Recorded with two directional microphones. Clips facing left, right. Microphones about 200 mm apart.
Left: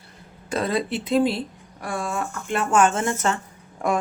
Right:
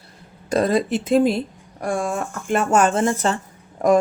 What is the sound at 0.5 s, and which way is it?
Speech, 45° right (ahead or behind).